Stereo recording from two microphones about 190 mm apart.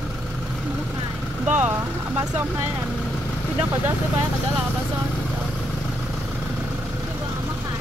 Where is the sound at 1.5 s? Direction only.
10° right (ahead or behind).